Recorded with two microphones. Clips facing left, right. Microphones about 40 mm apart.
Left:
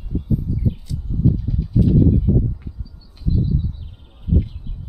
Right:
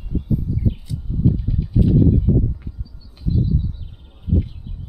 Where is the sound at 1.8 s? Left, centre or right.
Centre.